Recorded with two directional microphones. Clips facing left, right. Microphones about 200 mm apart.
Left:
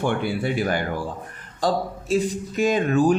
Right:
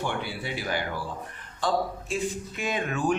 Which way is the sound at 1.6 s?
40° left (ahead or behind).